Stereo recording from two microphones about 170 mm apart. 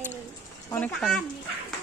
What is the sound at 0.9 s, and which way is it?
Speech, 5° left (ahead or behind).